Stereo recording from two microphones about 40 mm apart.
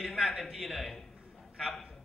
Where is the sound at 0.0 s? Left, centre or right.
Centre.